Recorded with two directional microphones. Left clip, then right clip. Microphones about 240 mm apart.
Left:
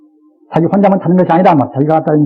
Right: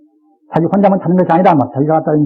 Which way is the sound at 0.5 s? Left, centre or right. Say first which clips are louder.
Left 1 dB; right.